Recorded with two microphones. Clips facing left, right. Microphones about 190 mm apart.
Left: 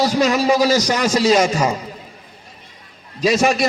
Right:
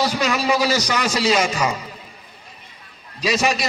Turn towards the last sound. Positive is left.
turn(degrees=50)  # may be behind; listen again after turning